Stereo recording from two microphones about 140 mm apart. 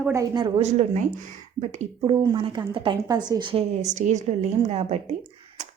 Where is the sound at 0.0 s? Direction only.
20° right (ahead or behind).